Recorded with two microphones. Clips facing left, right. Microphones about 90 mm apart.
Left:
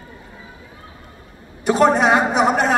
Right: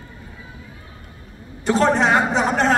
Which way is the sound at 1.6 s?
15° left (ahead or behind).